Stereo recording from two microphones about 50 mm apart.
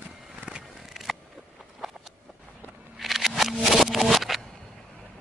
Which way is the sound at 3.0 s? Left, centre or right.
Centre.